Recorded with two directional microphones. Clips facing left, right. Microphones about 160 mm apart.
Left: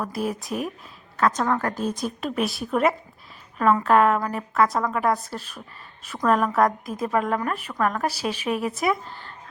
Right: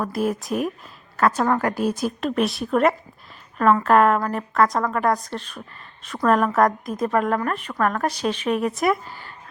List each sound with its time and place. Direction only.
0.0 s a woman's voice: centre (ahead or behind)